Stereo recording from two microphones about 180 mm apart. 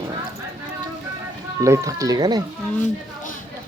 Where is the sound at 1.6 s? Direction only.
20° right (ahead or behind).